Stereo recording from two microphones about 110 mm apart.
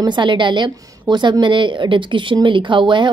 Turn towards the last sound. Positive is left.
turn(degrees=-45)  # may be behind; listen again after turning